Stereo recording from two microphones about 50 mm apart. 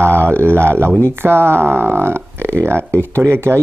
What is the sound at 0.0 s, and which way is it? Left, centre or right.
Speech, right.